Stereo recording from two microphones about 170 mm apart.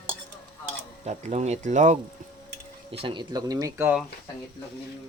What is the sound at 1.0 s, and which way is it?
Speech, 40° right (ahead or behind).